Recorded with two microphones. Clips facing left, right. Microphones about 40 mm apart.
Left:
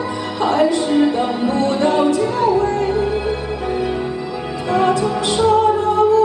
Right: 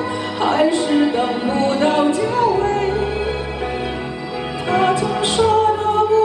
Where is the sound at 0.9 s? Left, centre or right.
Centre.